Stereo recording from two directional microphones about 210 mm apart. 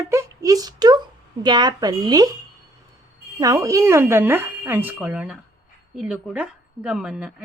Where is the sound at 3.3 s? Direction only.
15° right (ahead or behind).